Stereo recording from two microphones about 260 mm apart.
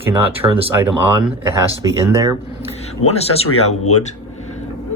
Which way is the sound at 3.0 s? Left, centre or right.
Left.